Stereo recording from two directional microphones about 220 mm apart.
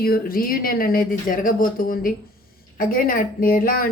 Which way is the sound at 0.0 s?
40° left (ahead or behind).